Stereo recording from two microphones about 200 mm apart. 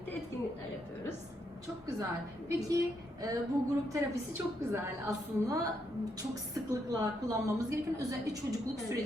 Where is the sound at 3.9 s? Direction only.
10° right (ahead or behind).